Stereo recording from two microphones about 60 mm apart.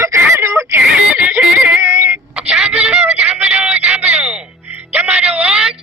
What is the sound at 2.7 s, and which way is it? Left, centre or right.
Music, right.